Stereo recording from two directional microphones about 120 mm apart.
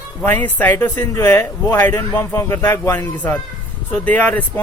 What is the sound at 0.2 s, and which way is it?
Speech, 15° left (ahead or behind).